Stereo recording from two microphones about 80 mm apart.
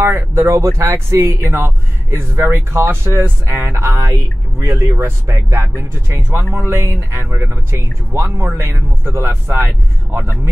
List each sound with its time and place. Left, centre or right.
0.0 s speech: right